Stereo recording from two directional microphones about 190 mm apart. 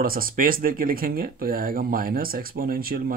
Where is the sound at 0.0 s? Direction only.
50° right (ahead or behind).